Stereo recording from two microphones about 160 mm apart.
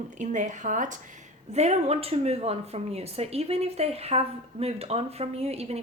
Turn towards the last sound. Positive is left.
turn(degrees=-40)  # may be behind; listen again after turning